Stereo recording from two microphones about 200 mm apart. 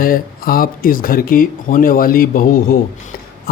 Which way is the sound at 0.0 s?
45° left (ahead or behind).